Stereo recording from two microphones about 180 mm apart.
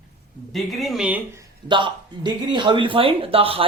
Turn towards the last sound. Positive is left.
turn(degrees=-30)  # may be behind; listen again after turning